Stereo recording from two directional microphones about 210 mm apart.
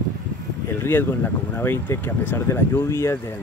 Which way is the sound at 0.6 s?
10° left (ahead or behind).